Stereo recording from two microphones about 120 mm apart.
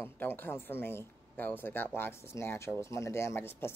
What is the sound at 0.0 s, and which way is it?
Speech, 15° left (ahead or behind).